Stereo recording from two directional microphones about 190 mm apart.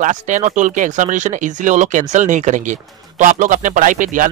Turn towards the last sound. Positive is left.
turn(degrees=-45)  # may be behind; listen again after turning